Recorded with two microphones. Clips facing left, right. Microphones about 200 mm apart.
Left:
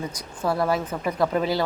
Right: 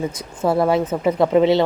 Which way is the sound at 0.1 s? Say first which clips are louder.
Right 6 dB; 25° right (ahead or behind).